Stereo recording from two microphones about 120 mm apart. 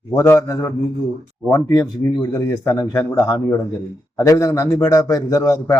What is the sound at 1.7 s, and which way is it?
A man's voice, 25° left (ahead or behind).